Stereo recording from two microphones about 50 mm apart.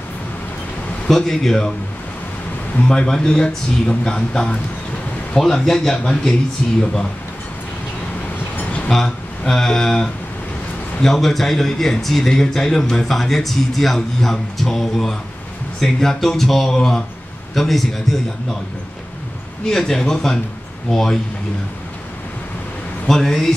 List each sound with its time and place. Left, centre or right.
1.0 s speech: centre
2.9 s speech: centre
8.8 s a man's voice: centre
19.6 s speech: centre
23.0 s speech: centre